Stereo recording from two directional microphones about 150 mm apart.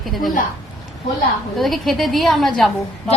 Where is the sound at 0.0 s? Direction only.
Centre (ahead or behind).